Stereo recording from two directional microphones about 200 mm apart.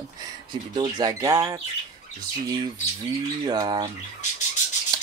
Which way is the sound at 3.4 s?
20° right (ahead or behind).